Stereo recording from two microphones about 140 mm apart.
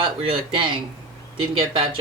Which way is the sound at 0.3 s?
40° right (ahead or behind).